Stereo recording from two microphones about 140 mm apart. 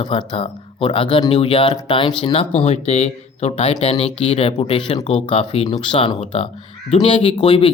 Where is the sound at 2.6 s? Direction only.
50° left (ahead or behind).